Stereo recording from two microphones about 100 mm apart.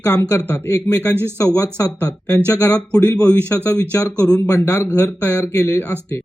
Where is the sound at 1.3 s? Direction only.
35° left (ahead or behind).